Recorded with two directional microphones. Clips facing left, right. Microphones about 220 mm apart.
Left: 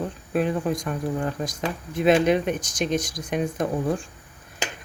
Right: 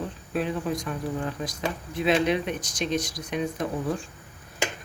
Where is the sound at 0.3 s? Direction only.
50° left (ahead or behind).